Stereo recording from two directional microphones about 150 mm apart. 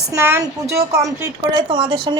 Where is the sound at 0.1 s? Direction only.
20° right (ahead or behind).